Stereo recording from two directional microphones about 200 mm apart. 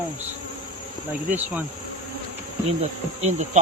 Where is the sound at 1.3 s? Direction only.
10° right (ahead or behind).